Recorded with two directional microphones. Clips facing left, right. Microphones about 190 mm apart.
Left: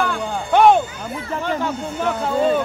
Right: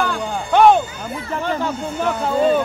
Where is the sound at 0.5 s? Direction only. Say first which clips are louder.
Right 1 dB; 15° left (ahead or behind).